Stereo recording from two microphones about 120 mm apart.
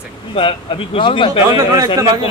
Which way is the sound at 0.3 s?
50° left (ahead or behind).